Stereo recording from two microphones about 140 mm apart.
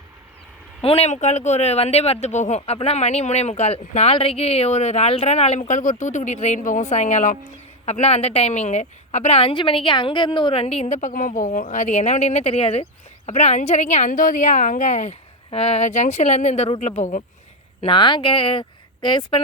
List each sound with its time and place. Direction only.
0.8 s a woman's voice: 45° left (ahead or behind)
15.4 s a woman's voice: 45° left (ahead or behind)
17.7 s speech: 35° left (ahead or behind)